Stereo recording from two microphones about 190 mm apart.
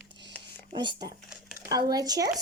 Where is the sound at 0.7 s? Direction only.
25° right (ahead or behind).